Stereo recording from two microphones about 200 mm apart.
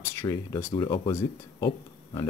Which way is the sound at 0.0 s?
10° left (ahead or behind).